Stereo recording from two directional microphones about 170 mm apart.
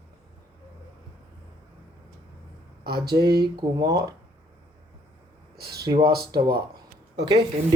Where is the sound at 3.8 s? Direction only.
20° right (ahead or behind).